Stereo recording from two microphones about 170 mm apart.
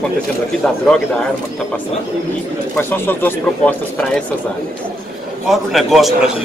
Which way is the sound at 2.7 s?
10° left (ahead or behind).